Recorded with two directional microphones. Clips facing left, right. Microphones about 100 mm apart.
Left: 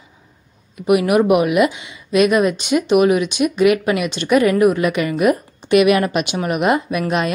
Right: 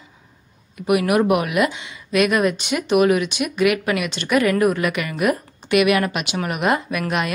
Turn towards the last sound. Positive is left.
turn(degrees=25)  # may be behind; listen again after turning